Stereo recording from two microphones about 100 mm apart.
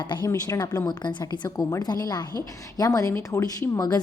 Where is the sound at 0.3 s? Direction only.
35° left (ahead or behind).